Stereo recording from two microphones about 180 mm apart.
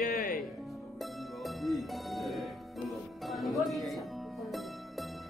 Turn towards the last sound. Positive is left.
turn(degrees=0)  # may be behind; listen again after turning